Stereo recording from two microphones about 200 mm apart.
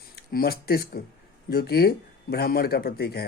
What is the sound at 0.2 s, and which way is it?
Speech, 50° left (ahead or behind).